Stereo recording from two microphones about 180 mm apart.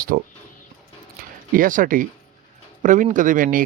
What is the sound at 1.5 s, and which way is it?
Speech, 50° right (ahead or behind).